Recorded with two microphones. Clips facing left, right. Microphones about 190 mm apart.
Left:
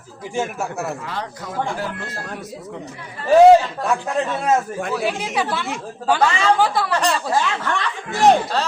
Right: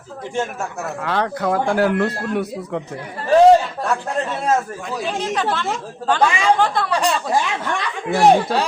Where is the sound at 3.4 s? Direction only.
5° left (ahead or behind).